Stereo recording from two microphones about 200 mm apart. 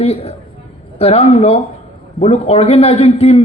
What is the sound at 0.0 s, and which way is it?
A man's voice, 30° left (ahead or behind).